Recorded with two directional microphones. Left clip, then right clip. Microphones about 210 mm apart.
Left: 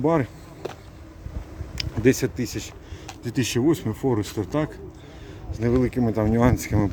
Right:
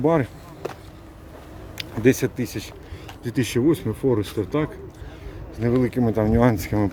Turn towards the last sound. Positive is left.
turn(degrees=0)  # may be behind; listen again after turning